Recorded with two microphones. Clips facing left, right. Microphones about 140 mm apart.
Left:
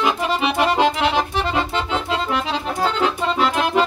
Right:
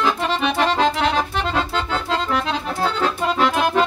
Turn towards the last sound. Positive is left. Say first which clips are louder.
# even
turn(degrees=0)  # may be behind; listen again after turning